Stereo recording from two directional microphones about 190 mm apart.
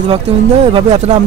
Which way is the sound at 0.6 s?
35° right (ahead or behind).